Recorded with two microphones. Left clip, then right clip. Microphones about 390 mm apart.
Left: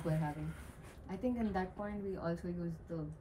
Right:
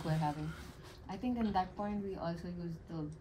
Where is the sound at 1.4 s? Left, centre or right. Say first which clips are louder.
Right 4 dB; centre.